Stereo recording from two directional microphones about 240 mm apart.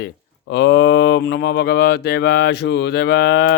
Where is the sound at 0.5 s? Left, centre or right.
Left.